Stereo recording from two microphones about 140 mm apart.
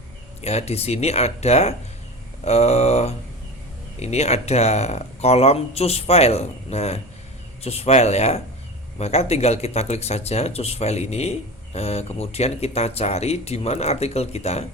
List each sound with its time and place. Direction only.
0.4 s speech: 50° left (ahead or behind)